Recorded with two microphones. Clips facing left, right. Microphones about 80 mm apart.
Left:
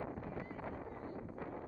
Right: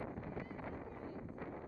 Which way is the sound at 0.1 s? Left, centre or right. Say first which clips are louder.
Left 1 dB; left.